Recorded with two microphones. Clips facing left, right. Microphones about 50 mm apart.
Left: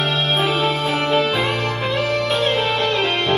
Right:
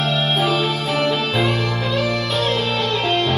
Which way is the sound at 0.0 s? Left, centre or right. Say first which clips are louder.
Even; left.